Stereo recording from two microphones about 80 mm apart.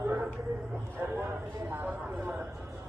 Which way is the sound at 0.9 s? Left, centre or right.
Right.